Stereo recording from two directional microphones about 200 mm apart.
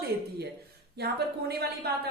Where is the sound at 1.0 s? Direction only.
55° right (ahead or behind).